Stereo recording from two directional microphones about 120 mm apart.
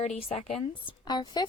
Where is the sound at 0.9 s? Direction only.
35° left (ahead or behind).